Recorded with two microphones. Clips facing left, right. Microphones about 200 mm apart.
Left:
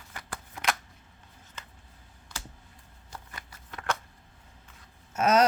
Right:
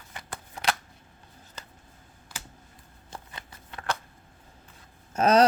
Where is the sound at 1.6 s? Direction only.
35° right (ahead or behind).